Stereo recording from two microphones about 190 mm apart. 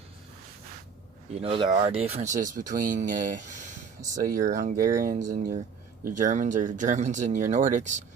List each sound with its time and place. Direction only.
1.4 s speech: 25° right (ahead or behind)